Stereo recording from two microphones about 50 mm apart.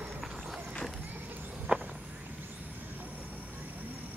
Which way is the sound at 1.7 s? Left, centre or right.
Right.